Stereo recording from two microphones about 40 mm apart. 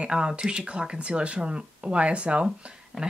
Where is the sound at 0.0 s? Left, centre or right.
Right.